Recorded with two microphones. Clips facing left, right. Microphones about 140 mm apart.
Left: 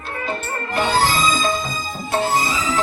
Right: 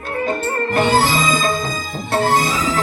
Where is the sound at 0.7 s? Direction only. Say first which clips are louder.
Right 2 dB; 50° right (ahead or behind).